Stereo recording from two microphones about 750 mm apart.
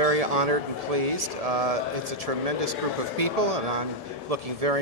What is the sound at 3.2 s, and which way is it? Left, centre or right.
Speech, right.